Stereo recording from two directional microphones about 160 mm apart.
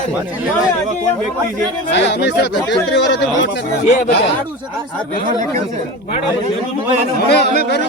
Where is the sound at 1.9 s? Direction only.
90° left.